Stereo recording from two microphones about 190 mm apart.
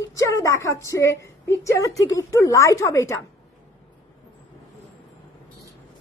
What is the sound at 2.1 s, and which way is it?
A woman's voice, 15° left (ahead or behind).